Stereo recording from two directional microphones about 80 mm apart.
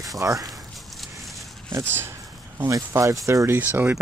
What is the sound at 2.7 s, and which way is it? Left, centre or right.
Speech, right.